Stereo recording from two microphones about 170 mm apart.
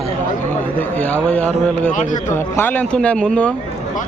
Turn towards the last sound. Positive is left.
turn(degrees=5)  # may be behind; listen again after turning